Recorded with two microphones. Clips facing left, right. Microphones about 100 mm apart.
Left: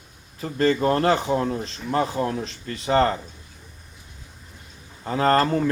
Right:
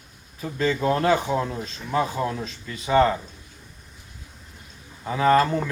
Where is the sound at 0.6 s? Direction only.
60° left (ahead or behind).